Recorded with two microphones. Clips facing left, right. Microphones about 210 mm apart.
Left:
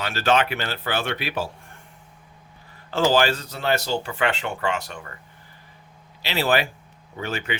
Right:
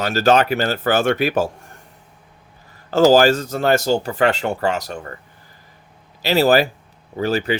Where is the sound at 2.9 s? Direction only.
40° right (ahead or behind).